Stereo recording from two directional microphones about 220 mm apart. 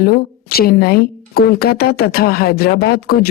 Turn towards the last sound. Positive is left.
turn(degrees=45)  # may be behind; listen again after turning